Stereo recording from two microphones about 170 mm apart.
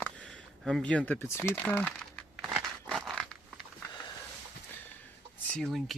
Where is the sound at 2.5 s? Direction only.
Centre (ahead or behind).